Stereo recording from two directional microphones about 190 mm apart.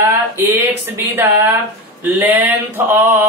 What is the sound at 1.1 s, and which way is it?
Speech, 10° right (ahead or behind).